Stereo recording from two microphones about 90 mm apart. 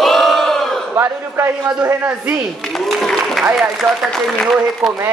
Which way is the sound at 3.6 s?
Centre (ahead or behind).